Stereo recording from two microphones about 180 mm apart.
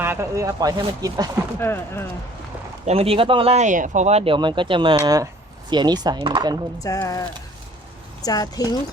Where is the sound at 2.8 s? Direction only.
35° right (ahead or behind).